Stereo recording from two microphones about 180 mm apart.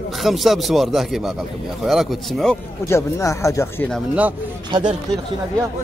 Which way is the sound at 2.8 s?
15° left (ahead or behind).